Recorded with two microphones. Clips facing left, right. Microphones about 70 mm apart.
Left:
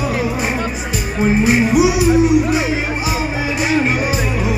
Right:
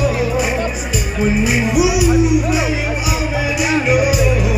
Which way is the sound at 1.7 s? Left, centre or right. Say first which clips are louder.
Right 1 dB; left.